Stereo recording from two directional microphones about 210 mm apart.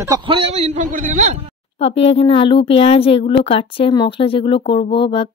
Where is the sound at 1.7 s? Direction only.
30° left (ahead or behind).